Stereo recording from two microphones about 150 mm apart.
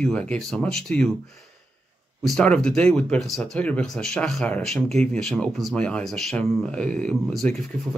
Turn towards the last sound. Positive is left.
turn(degrees=0)  # may be behind; listen again after turning